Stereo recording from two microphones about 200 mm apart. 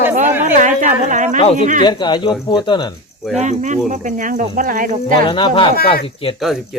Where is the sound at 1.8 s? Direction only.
20° left (ahead or behind).